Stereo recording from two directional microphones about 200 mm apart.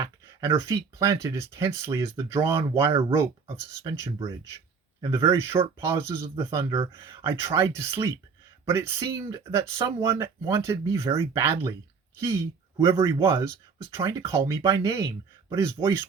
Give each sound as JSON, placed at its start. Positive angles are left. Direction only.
{"t": 0.0, "sound": "speech", "side_deg": -15}
{"t": 12.8, "sound": "speech", "side_deg": -15}